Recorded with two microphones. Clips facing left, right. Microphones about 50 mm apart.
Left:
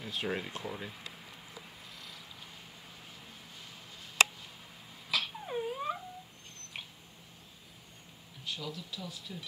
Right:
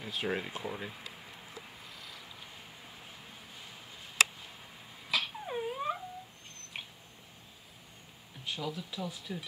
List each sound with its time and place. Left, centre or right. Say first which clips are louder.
0.0 s speech: right 1 dB; centre
2.0 s vehicle: even; centre
5.1 s a sound: right 1 dB; centre
8.5 s speech: right 3 dB; centre